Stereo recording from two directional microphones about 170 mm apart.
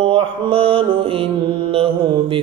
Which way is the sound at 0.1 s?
30° right (ahead or behind).